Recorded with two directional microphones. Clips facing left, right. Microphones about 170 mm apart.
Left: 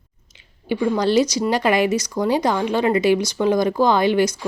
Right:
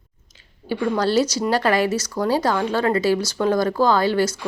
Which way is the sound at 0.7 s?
15° left (ahead or behind).